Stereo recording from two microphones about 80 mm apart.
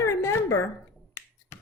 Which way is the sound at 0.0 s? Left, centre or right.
Left.